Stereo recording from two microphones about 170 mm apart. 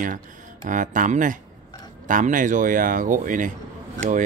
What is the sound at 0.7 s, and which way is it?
Speech, 50° right (ahead or behind).